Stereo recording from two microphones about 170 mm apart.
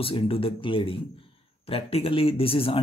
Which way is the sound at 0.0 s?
35° left (ahead or behind).